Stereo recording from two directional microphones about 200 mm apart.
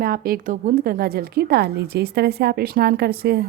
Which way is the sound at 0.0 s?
45° right (ahead or behind).